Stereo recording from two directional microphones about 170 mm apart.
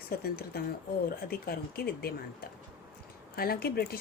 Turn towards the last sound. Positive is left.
turn(degrees=65)  # may be behind; listen again after turning